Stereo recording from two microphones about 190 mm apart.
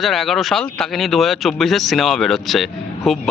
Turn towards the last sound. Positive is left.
turn(degrees=0)  # may be behind; listen again after turning